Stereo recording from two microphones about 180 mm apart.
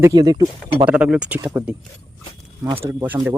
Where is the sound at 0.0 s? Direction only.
20° right (ahead or behind).